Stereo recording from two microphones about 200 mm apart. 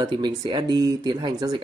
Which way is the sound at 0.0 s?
20° right (ahead or behind).